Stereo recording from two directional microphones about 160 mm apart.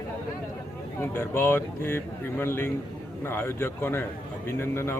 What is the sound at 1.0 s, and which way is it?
Speech, 15° left (ahead or behind).